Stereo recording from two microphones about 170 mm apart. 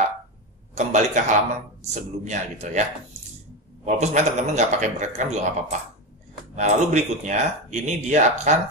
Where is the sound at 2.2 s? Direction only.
45° right (ahead or behind).